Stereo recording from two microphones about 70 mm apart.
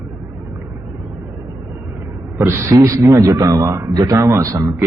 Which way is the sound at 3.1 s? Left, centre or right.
Right.